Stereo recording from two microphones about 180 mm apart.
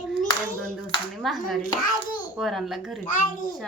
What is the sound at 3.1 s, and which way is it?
Speech, 50° left (ahead or behind).